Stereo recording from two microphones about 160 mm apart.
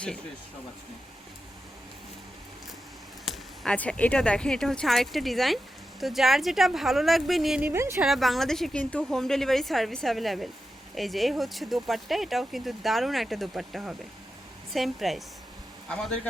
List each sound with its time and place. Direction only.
3.2 s speech: 5° left (ahead or behind)
7.7 s speech: 15° right (ahead or behind)
8.0 s speech: centre (ahead or behind)